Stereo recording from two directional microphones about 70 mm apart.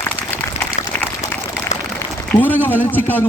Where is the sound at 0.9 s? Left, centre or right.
Left.